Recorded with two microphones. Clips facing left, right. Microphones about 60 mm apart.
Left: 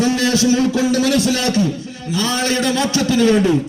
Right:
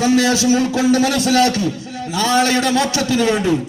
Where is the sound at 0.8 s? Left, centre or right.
Right.